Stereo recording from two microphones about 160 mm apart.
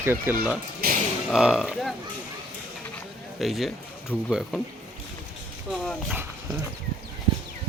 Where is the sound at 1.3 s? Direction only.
5° right (ahead or behind).